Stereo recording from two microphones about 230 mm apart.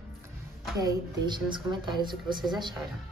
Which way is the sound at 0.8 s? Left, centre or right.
Centre.